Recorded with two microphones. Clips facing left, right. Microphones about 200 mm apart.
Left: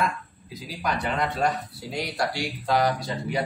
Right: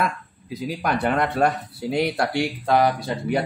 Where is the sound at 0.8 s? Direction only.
55° right (ahead or behind).